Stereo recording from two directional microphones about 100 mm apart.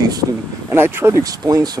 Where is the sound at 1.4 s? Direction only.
40° right (ahead or behind).